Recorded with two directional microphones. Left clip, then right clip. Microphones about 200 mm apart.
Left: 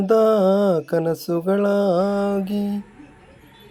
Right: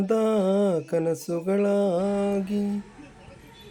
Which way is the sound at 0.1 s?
20° left (ahead or behind).